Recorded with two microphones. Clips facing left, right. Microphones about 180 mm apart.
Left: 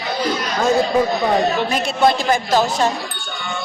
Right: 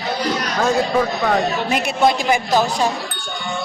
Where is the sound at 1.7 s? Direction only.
15° right (ahead or behind).